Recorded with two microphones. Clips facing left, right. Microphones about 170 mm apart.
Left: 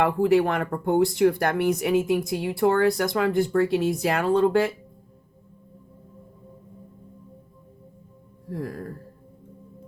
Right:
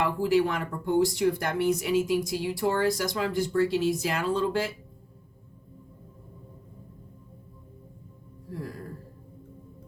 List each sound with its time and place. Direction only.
0.0 s speech: 60° left (ahead or behind)
8.4 s speech: 55° left (ahead or behind)